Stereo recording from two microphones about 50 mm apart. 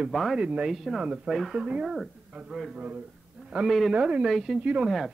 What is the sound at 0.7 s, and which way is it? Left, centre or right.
Speech, centre.